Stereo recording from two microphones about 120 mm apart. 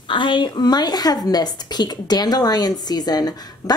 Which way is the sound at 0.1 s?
40° left (ahead or behind).